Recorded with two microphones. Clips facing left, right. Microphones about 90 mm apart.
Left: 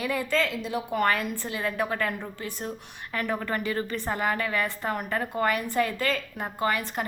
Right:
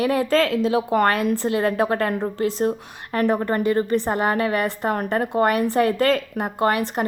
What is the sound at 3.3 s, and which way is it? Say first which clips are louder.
Speech: right 7 dB; 30° right (ahead or behind).